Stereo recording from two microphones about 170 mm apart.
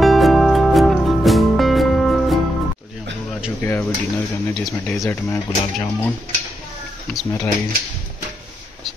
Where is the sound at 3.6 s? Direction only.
10° left (ahead or behind).